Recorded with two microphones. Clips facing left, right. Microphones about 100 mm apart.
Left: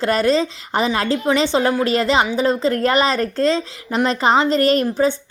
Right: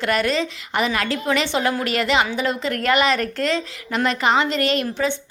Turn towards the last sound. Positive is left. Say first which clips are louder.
# left 5 dB
turn(degrees=35)  # may be behind; listen again after turning